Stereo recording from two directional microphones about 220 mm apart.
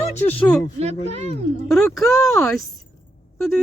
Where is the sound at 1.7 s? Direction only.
Centre (ahead or behind).